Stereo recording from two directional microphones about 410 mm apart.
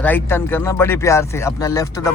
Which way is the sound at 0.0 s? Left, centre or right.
Centre.